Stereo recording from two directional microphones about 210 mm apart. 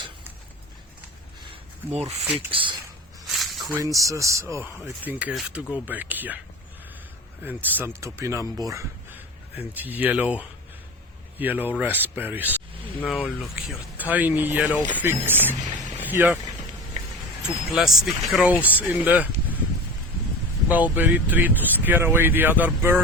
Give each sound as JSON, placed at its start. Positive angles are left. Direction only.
{"t": 2.0, "sound": "speech", "side_deg": -30}
{"t": 2.5, "sound": "a sound", "side_deg": -25}
{"t": 3.2, "sound": "a sound", "side_deg": 0}
{"t": 3.8, "sound": "speech", "side_deg": -15}
{"t": 7.4, "sound": "speech", "side_deg": -10}
{"t": 13.0, "sound": "speech", "side_deg": 5}
{"t": 16.0, "sound": "vehicle", "side_deg": -10}
{"t": 17.7, "sound": "speech", "side_deg": 0}
{"t": 20.7, "sound": "speech", "side_deg": -5}